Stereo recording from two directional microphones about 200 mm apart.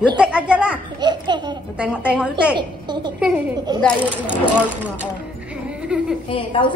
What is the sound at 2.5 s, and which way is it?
Speech, 20° right (ahead or behind).